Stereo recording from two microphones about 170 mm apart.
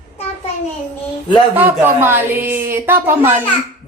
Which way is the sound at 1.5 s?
10° right (ahead or behind).